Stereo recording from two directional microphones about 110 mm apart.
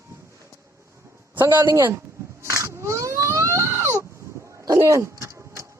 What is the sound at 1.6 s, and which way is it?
Speech, 20° right (ahead or behind).